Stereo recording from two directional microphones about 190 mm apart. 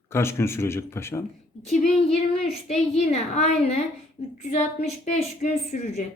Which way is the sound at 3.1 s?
35° left (ahead or behind).